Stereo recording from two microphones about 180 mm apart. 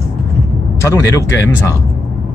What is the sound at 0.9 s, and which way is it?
Speech, 15° left (ahead or behind).